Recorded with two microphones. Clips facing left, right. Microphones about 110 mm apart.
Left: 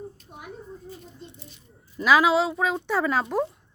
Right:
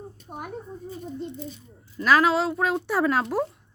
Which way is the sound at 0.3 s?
50° right (ahead or behind).